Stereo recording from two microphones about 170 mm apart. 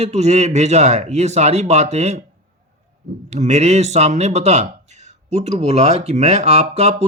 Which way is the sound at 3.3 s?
40° right (ahead or behind).